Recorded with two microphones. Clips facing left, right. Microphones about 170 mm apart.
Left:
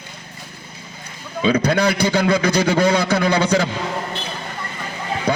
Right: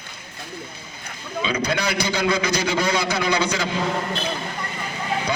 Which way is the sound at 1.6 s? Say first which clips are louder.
Left 6 dB; 55° left (ahead or behind).